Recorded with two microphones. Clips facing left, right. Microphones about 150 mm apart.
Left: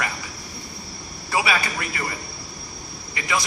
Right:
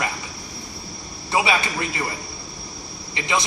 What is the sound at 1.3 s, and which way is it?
Speech, 25° right (ahead or behind).